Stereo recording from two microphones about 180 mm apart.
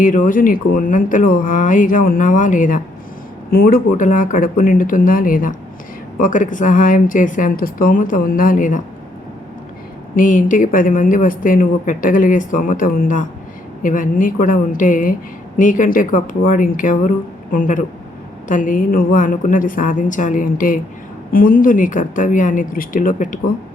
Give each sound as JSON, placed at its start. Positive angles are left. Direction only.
{"t": 0.0, "sound": "speech", "side_deg": 50}
{"t": 10.2, "sound": "speech", "side_deg": 45}